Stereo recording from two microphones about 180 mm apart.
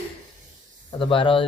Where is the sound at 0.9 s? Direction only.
30° left (ahead or behind).